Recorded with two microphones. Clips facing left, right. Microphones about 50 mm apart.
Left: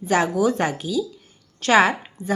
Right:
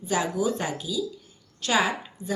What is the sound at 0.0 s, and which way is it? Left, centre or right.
A woman's voice, left.